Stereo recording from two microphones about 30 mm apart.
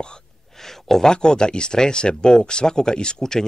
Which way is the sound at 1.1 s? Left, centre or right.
Left.